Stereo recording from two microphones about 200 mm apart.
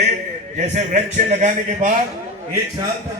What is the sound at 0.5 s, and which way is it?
A man's voice, 35° right (ahead or behind).